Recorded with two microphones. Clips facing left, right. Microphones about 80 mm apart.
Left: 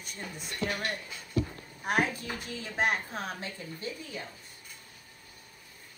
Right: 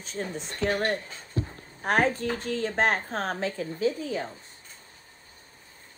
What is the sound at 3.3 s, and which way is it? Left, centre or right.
Speech, right.